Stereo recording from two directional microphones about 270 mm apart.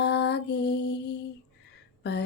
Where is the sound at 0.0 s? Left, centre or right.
Left.